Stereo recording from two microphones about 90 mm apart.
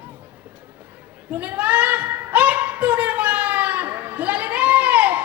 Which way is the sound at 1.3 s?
20° right (ahead or behind).